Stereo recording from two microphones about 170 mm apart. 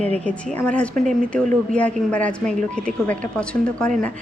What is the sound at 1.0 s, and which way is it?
Speech, 50° right (ahead or behind).